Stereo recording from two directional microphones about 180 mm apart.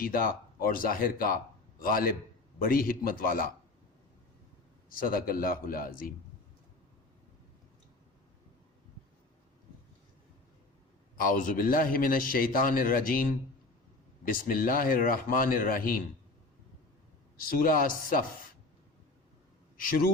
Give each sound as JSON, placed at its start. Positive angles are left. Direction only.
{"t": 0.0, "sound": "a man's voice", "side_deg": 50}
{"t": 4.9, "sound": "a man's voice", "side_deg": 50}
{"t": 11.2, "sound": "a man's voice", "side_deg": 50}
{"t": 17.5, "sound": "a man's voice", "side_deg": 50}
{"t": 19.7, "sound": "speech", "side_deg": 50}